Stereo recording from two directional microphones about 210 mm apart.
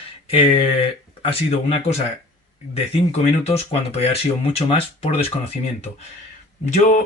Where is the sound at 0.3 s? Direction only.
25° left (ahead or behind).